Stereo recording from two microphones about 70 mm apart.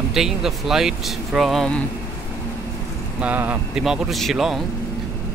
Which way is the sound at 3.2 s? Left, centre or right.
Right.